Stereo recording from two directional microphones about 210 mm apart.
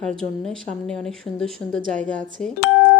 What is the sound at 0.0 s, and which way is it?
Speech, 5° left (ahead or behind).